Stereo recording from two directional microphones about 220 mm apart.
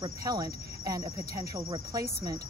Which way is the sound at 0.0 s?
15° right (ahead or behind).